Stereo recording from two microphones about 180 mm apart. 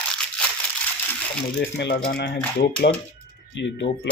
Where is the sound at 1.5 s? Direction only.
70° left (ahead or behind).